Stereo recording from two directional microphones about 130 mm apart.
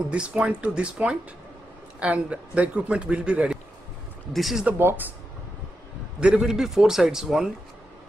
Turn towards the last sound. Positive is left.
turn(degrees=-5)  # may be behind; listen again after turning